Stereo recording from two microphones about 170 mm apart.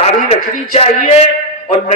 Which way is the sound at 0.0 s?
35° left (ahead or behind).